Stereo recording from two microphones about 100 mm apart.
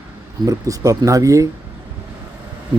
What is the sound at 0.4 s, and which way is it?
Speech, 35° right (ahead or behind).